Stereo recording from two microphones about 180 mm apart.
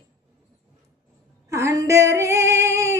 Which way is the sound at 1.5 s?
15° right (ahead or behind).